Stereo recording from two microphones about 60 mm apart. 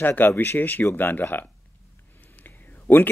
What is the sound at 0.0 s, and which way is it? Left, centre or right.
Speech, left.